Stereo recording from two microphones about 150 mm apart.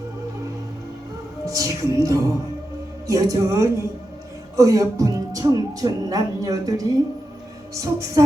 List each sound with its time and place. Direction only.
1.5 s speech: 20° right (ahead or behind)